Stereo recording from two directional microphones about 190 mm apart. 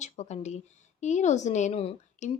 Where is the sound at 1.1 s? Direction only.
40° left (ahead or behind).